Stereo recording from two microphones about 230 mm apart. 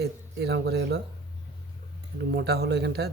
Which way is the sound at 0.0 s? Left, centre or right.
Right.